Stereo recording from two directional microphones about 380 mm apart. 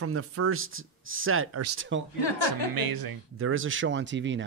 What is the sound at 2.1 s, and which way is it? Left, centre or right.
Speech, left.